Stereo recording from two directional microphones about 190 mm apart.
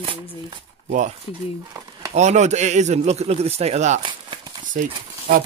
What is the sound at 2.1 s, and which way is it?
Speech, 40° right (ahead or behind).